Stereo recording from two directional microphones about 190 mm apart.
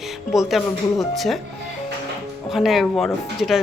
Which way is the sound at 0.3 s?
Centre (ahead or behind).